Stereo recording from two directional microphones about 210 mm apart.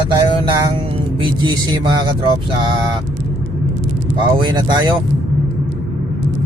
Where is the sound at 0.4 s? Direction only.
25° right (ahead or behind).